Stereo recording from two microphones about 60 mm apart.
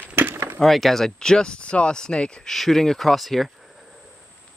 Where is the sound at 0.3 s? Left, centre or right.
Right.